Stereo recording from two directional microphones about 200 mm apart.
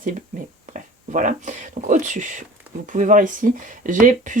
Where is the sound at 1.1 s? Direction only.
40° right (ahead or behind).